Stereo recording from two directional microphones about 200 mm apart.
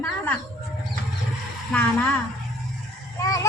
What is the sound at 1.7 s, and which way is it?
Speech, 5° left (ahead or behind).